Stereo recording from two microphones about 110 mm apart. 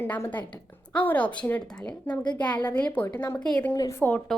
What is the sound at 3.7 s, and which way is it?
Speech, 25° left (ahead or behind).